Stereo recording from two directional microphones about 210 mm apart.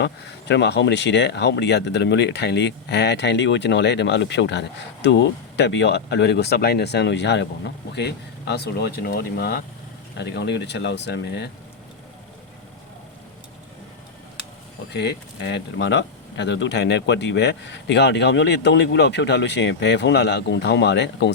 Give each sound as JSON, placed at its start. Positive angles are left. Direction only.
{"t": 0.0, "sound": "speech", "side_deg": 55}
{"t": 14.9, "sound": "speech", "side_deg": 55}